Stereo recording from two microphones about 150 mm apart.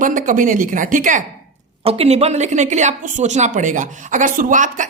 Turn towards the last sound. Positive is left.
turn(degrees=-60)  # may be behind; listen again after turning